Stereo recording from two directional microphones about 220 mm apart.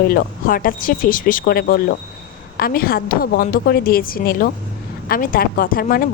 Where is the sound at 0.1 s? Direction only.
40° left (ahead or behind).